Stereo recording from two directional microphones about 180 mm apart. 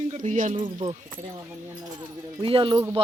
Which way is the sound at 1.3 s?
20° right (ahead or behind).